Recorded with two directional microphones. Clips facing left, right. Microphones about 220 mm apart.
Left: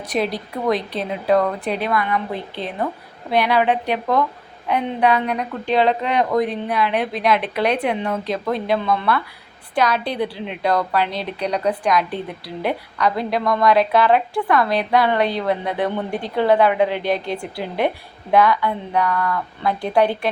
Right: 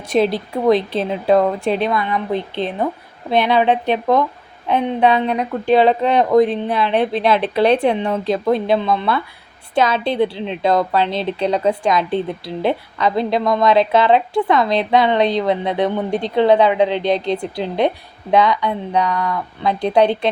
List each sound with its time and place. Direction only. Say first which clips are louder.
0.1 s a woman's voice: right 6 dB; 25° right (ahead or behind)